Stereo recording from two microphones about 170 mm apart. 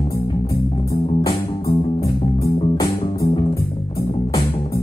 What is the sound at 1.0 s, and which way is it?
Music, 30° left (ahead or behind).